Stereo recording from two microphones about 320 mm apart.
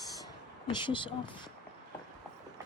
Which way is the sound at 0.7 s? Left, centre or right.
Centre.